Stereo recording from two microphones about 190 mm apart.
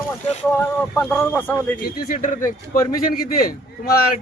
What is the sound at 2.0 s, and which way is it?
A man's voice, 45° left (ahead or behind).